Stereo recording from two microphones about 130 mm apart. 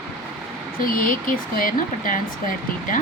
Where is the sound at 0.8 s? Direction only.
90° left.